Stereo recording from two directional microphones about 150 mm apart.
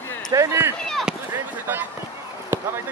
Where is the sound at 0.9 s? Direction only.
Centre (ahead or behind).